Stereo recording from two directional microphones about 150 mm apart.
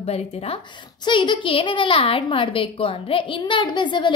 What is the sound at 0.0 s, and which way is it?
Speech, 40° left (ahead or behind).